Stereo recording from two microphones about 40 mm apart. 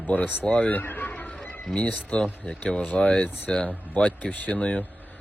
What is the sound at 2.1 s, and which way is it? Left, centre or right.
Speech, left.